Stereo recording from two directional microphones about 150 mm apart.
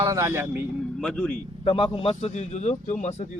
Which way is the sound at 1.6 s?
35° left (ahead or behind).